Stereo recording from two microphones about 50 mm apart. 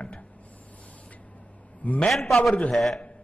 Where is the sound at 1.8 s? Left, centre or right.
Left.